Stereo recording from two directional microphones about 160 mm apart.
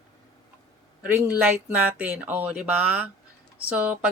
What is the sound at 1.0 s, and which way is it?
Speech, 10° right (ahead or behind).